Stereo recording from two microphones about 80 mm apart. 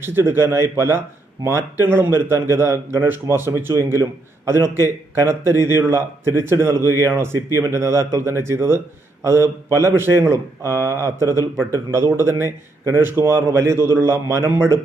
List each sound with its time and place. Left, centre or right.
0.0 s speech: right